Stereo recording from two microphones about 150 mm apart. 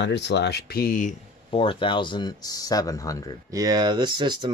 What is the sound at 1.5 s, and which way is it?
Speech, 35° left (ahead or behind).